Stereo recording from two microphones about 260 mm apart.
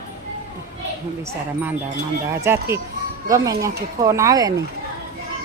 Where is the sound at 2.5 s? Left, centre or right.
Centre.